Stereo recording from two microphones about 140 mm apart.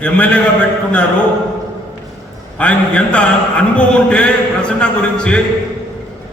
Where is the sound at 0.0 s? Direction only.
10° left (ahead or behind).